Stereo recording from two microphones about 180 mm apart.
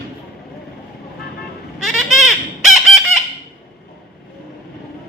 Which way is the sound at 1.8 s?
Centre (ahead or behind).